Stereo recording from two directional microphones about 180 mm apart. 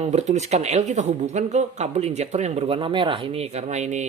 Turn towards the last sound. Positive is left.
turn(degrees=-40)  # may be behind; listen again after turning